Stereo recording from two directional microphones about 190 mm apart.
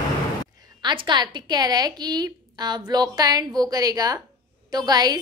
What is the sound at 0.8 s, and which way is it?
A woman's voice, 25° right (ahead or behind).